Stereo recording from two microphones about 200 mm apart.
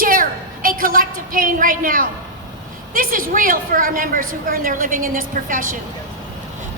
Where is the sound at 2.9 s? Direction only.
45° right (ahead or behind).